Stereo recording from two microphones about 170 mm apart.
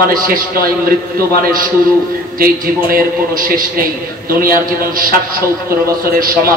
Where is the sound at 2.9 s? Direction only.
55° right (ahead or behind).